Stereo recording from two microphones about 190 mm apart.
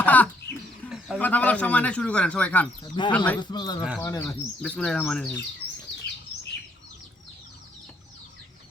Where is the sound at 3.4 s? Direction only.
25° left (ahead or behind).